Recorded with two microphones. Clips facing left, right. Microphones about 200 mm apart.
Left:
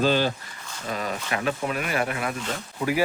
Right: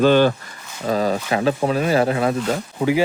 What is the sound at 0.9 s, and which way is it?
Speech, 35° right (ahead or behind).